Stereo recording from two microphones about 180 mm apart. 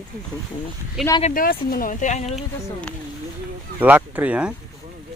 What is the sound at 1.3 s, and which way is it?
Speech, 55° left (ahead or behind).